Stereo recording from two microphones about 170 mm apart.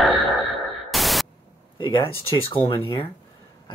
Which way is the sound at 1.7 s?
30° left (ahead or behind).